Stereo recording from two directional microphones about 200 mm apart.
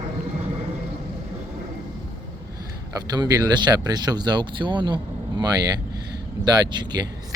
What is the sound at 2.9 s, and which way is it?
Speech, 20° right (ahead or behind).